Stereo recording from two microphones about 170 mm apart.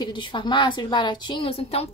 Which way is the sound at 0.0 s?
30° left (ahead or behind).